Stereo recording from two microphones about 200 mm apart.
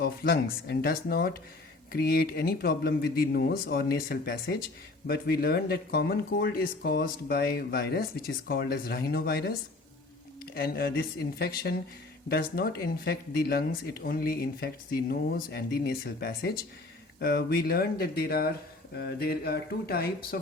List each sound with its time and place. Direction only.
0.0 s speech: 50° left (ahead or behind)